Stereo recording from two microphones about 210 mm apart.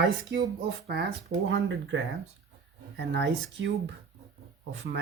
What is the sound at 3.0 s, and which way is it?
Speech, 55° right (ahead or behind).